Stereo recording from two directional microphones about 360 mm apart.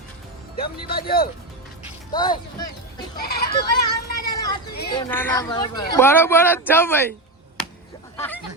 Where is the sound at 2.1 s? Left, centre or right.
Centre.